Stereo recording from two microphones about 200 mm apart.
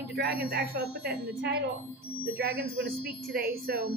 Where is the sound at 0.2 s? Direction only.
50° right (ahead or behind).